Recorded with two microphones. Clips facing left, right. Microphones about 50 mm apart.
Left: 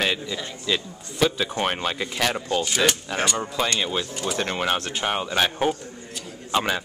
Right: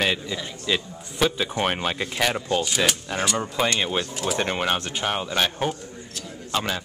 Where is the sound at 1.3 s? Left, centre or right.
Centre.